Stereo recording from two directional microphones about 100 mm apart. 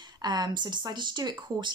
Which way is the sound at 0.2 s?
45° right (ahead or behind).